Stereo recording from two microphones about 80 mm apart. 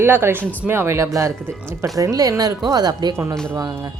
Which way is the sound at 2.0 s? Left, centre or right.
Right.